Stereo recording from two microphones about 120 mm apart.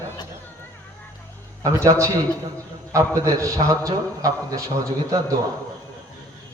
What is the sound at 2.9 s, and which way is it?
A man's voice, 25° right (ahead or behind).